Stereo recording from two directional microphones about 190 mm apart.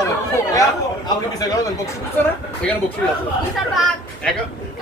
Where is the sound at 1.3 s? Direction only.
15° left (ahead or behind).